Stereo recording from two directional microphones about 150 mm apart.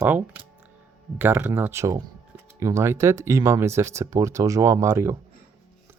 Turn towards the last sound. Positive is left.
turn(degrees=-15)  # may be behind; listen again after turning